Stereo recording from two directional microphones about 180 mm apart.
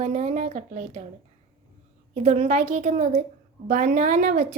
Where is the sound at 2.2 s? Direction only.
40° right (ahead or behind).